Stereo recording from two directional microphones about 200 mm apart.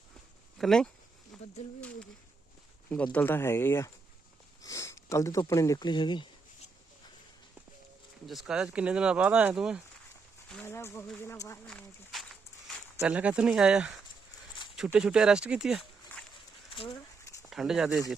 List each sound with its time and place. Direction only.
0.6 s speech: centre (ahead or behind)
1.3 s a sound: centre (ahead or behind)
2.9 s speech: 5° left (ahead or behind); by 6.2 s 20° left (ahead or behind)
8.3 s speech: centre (ahead or behind)
10.5 s speech: 10° left (ahead or behind)
16.6 s speech: 25° left (ahead or behind)
17.4 s speech: centre (ahead or behind)